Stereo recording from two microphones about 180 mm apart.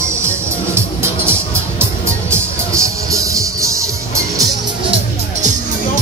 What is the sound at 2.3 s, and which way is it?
Music, 15° right (ahead or behind).